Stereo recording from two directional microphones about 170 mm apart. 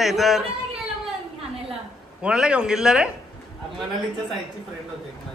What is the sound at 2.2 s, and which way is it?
Speech, 5° right (ahead or behind).